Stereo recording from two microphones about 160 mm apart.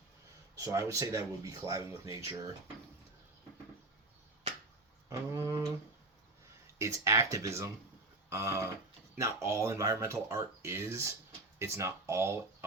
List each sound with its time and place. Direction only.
0.6 s speech: 20° right (ahead or behind)
5.0 s a sound: 15° right (ahead or behind)
6.7 s speech: 20° right (ahead or behind)